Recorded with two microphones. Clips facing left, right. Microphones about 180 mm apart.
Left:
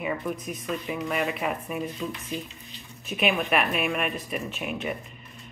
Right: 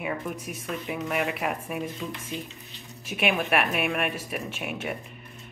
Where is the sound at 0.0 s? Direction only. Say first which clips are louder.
Left 2 dB; 5° right (ahead or behind).